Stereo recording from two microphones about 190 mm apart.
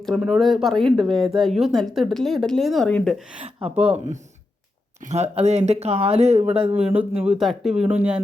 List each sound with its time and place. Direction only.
0.0 s speech: centre (ahead or behind)
3.4 s speech: 30° right (ahead or behind)
6.7 s speech: 5° right (ahead or behind)